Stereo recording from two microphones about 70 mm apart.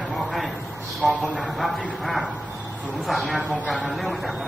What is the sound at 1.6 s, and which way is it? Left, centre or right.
Speech, centre.